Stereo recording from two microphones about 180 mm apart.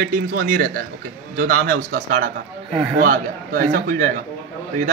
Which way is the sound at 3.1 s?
50° right (ahead or behind).